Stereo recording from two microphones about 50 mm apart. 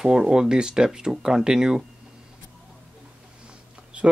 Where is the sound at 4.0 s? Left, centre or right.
Right.